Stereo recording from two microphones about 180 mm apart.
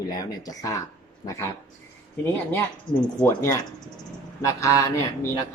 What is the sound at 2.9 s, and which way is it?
Speech, 25° left (ahead or behind).